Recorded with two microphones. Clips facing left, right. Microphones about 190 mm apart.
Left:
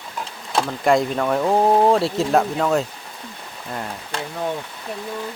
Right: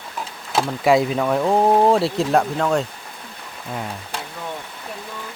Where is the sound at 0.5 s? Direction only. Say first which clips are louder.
Right 1 dB; 5° right (ahead or behind).